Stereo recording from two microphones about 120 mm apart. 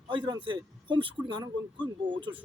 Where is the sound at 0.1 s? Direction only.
45° right (ahead or behind).